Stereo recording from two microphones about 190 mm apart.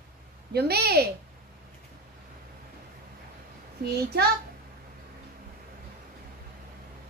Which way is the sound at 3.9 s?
55° right (ahead or behind).